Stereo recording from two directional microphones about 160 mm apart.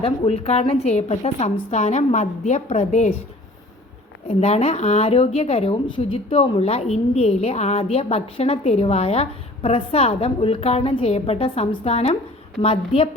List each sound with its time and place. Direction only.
0.0 s a woman's voice: 40° left (ahead or behind)
4.3 s a woman's voice: 40° left (ahead or behind)